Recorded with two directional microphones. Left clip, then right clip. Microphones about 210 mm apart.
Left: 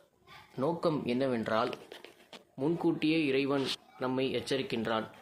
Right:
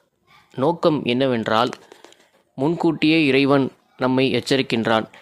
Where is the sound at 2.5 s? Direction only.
50° right (ahead or behind).